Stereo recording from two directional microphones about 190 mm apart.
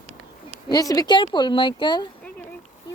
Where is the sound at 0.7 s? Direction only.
20° left (ahead or behind).